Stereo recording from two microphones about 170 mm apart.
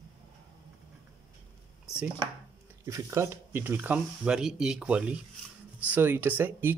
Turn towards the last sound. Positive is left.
turn(degrees=-10)  # may be behind; listen again after turning